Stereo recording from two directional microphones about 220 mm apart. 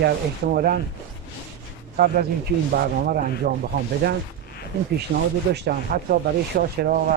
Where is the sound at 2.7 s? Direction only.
45° right (ahead or behind).